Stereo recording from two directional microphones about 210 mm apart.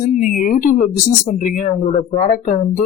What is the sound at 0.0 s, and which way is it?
Speech, 40° left (ahead or behind).